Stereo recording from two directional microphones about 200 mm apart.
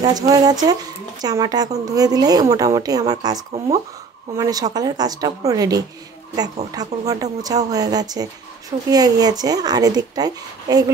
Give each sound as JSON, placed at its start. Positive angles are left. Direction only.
{"t": 0.0, "sound": "speech", "side_deg": -20}
{"t": 4.4, "sound": "speech", "side_deg": -20}